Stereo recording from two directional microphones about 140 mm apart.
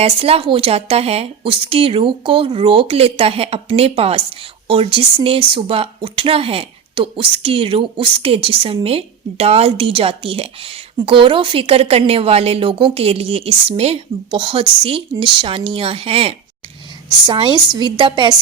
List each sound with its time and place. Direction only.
0.0 s a woman's voice: 45° right (ahead or behind)